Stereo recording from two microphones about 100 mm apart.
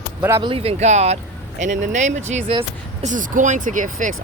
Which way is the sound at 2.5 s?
65° right (ahead or behind).